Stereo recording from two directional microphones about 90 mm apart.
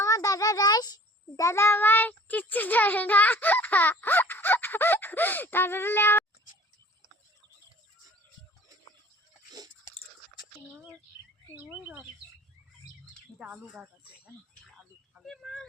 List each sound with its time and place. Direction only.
0.0 s a sound: 40° left (ahead or behind)
1.5 s a child's voice: 30° left (ahead or behind)
11.5 s speech: 15° right (ahead or behind)
13.4 s speech: 15° right (ahead or behind)
15.2 s speech: centre (ahead or behind)